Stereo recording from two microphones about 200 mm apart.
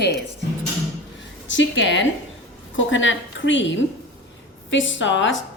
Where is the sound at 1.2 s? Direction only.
65° left (ahead or behind).